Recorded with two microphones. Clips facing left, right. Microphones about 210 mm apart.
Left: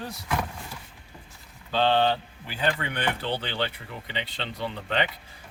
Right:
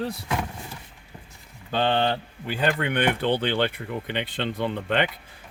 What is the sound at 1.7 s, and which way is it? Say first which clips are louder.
Speech: even; 55° right (ahead or behind).